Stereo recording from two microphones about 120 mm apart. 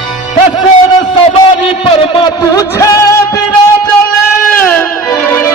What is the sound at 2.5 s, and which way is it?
Music, 30° left (ahead or behind).